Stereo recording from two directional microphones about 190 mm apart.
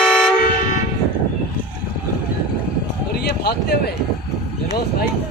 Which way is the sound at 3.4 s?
55° left (ahead or behind).